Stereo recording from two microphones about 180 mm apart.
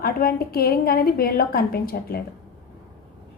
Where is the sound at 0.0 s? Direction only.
55° left (ahead or behind).